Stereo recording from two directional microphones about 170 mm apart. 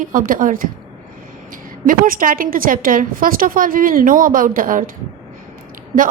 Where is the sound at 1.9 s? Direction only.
55° right (ahead or behind).